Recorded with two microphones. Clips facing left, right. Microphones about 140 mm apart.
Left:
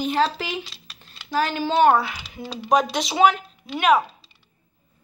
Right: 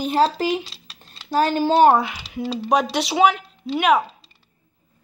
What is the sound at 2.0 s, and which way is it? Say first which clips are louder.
A woman's voice: right 2 dB; 15° right (ahead or behind).